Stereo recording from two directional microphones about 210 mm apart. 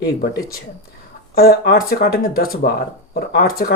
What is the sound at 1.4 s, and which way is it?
Speech, 50° left (ahead or behind).